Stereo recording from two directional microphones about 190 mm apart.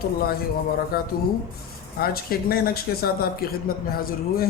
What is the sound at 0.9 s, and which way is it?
A man's voice, 50° left (ahead or behind).